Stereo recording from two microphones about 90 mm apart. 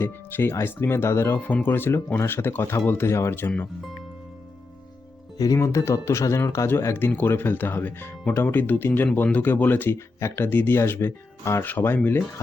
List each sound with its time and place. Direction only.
0.0 s speech: 25° left (ahead or behind)
5.5 s speech: 30° left (ahead or behind)